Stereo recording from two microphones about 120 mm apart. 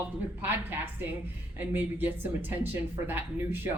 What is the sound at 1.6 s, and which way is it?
A woman's voice, 15° right (ahead or behind).